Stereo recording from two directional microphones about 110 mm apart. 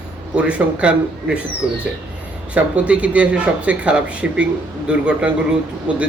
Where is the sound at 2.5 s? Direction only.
10° right (ahead or behind).